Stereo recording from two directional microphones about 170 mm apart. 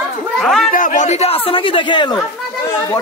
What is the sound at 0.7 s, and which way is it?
A man's voice, 50° left (ahead or behind).